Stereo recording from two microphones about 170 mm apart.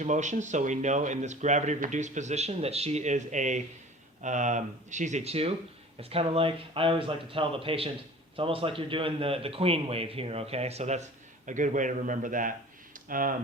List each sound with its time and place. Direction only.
0.0 s a man's voice: 45° right (ahead or behind)